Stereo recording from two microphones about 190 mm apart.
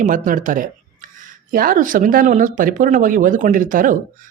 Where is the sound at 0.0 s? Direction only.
45° right (ahead or behind).